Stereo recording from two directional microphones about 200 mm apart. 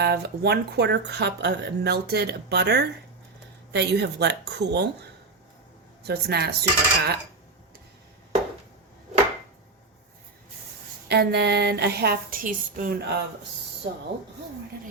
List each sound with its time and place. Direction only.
0.0 s speech: 50° right (ahead or behind)
11.1 s speech: 55° right (ahead or behind)